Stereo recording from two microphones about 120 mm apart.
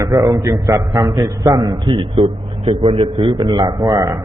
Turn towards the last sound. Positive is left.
turn(degrees=-35)  # may be behind; listen again after turning